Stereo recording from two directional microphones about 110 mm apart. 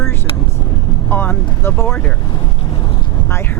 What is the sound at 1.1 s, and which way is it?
Vehicle, 20° left (ahead or behind).